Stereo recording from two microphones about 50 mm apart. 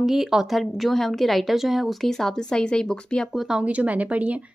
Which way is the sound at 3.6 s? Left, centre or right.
Right.